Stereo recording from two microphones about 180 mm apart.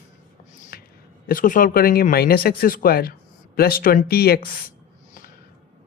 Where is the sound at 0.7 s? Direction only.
55° left (ahead or behind).